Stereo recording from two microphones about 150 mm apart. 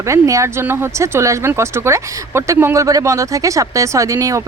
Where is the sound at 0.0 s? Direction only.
20° right (ahead or behind).